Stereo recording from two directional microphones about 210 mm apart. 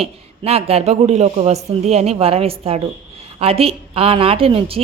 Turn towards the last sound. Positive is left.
turn(degrees=-25)  # may be behind; listen again after turning